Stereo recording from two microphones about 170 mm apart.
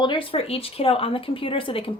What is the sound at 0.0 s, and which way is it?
A woman's voice, 30° left (ahead or behind).